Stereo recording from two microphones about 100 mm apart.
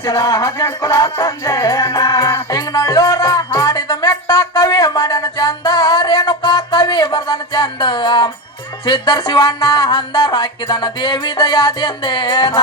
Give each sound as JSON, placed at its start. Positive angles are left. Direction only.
{"t": 0.0, "sound": "music", "side_deg": 40}